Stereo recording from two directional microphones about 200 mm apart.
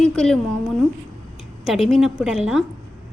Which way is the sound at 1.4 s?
Centre (ahead or behind).